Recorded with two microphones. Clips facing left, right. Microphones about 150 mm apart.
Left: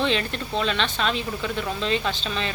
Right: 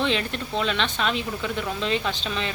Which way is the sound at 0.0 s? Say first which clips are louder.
Left 1 dB; 15° right (ahead or behind).